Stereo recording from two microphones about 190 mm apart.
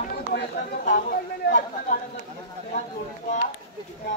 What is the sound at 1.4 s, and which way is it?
Speech, 55° left (ahead or behind).